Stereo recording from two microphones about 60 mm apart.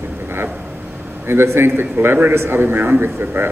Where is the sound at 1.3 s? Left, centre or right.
Right.